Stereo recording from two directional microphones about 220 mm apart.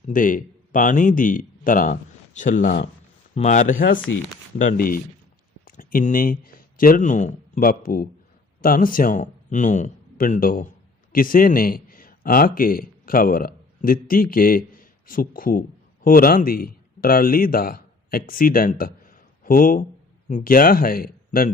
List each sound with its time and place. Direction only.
0.1 s a man's voice: 40° left (ahead or behind)